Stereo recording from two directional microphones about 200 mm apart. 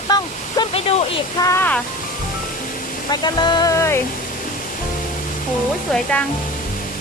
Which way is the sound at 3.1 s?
20° left (ahead or behind).